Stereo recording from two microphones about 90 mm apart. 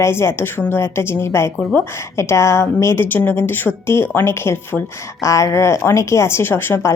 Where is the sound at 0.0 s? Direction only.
30° left (ahead or behind).